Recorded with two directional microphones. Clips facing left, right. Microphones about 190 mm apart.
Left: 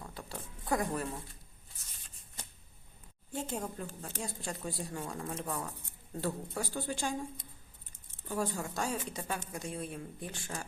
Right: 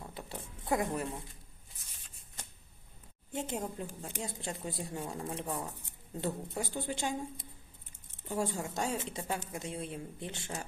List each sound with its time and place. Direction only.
0.1 s zipper: 20° right (ahead or behind)
3.3 s a woman's voice: 20° right (ahead or behind)
8.3 s a woman's voice: 25° right (ahead or behind)